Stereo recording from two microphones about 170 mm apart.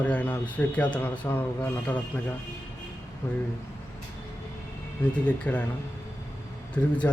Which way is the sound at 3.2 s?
15° left (ahead or behind).